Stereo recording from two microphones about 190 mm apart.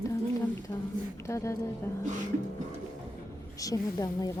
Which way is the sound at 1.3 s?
15° left (ahead or behind).